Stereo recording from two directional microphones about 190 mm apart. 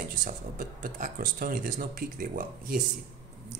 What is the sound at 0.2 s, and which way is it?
Speech, 45° right (ahead or behind).